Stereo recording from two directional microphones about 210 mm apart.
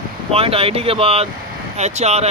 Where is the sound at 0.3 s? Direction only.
25° right (ahead or behind).